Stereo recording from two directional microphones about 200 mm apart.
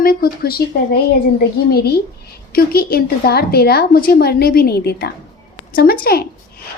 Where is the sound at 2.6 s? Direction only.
50° left (ahead or behind).